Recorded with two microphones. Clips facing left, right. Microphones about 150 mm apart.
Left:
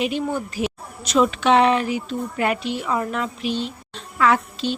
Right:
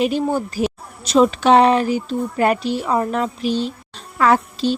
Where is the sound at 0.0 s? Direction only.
35° right (ahead or behind).